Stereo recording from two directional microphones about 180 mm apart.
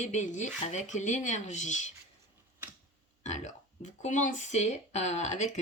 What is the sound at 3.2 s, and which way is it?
Speech, 40° left (ahead or behind).